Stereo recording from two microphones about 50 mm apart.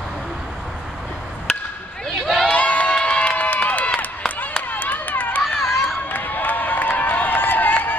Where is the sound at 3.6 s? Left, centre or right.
Left.